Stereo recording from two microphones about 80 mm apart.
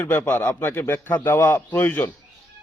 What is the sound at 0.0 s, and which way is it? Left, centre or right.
Speech, left.